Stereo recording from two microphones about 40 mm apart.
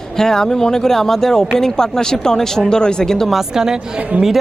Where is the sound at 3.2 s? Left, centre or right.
Centre.